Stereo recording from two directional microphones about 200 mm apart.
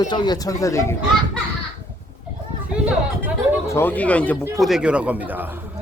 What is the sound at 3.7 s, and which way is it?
Speech, 10° left (ahead or behind).